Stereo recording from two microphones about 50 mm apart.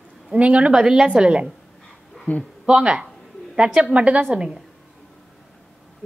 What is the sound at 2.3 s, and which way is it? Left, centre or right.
Speech, left.